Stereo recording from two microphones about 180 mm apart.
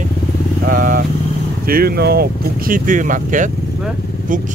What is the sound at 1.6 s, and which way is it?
Speech, 55° right (ahead or behind).